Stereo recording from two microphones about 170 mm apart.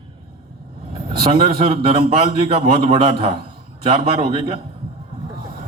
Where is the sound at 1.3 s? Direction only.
30° right (ahead or behind).